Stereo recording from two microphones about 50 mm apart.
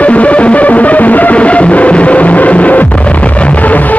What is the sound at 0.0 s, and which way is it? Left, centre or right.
Music, left.